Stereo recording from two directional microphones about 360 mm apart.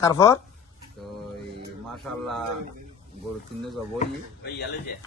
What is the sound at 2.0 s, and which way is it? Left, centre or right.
Speech, centre.